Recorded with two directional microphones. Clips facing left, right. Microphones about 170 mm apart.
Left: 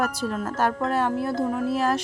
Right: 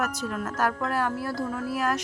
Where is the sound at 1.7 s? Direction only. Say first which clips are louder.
Left 2 dB; 30° left (ahead or behind).